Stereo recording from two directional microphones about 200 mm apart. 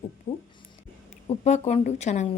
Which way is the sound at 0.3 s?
30° left (ahead or behind).